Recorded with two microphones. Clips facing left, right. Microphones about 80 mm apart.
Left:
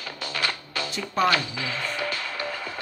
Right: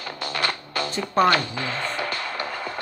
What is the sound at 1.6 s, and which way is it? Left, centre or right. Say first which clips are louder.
Music: right 2 dB; right.